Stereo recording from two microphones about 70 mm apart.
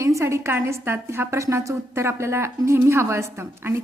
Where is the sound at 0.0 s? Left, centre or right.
Right.